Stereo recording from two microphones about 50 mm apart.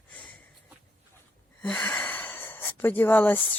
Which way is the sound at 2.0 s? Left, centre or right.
Left.